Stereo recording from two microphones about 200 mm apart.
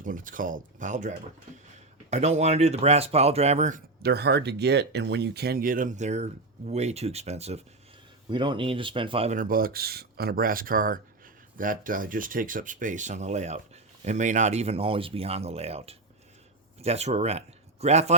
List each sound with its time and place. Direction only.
0.0 s speech: 40° right (ahead or behind)
4.0 s speech: 55° right (ahead or behind); by 18.1 s 35° right (ahead or behind)